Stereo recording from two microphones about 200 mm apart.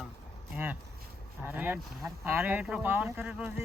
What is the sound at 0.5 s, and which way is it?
Vehicle, 10° right (ahead or behind).